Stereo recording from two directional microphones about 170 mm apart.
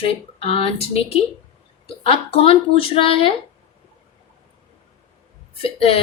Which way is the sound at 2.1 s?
35° left (ahead or behind).